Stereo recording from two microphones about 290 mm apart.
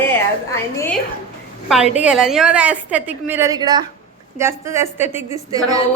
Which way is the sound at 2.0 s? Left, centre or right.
Centre.